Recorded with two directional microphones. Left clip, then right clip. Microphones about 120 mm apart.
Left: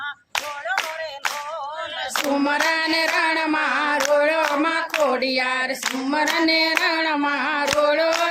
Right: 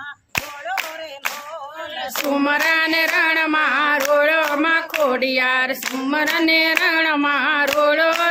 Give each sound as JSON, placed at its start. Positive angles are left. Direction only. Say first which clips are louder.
{"t": 2.3, "sound": "child singing", "louder": "right 4 dB", "side_deg": -20}
{"t": 4.1, "sound": "music", "louder": "right 2 dB", "side_deg": -20}
{"t": 4.5, "sound": "a sound", "louder": "right 3 dB", "side_deg": -20}
{"t": 5.0, "sound": "child singing", "louder": "right 3 dB", "side_deg": -20}